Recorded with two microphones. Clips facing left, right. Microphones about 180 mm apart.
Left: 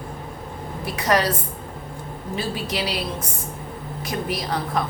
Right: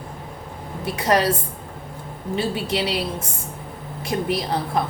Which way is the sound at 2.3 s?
25° right (ahead or behind).